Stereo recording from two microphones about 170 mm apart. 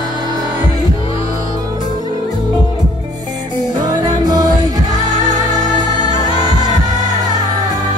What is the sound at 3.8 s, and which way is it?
Music, 25° right (ahead or behind).